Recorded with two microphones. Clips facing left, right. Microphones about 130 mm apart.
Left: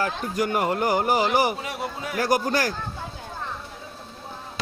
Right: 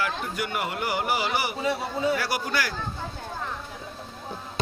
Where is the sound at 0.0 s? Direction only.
40° left (ahead or behind).